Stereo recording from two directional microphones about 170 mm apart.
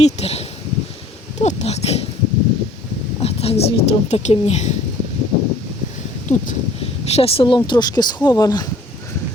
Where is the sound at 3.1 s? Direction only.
35° left (ahead or behind).